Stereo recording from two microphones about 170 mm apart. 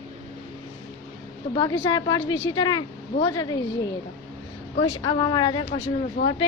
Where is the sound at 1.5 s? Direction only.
25° left (ahead or behind).